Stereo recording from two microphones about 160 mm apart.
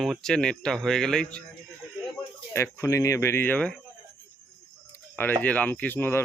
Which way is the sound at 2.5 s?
15° left (ahead or behind).